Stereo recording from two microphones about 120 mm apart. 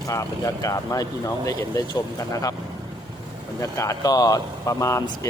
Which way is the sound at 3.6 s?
25° left (ahead or behind).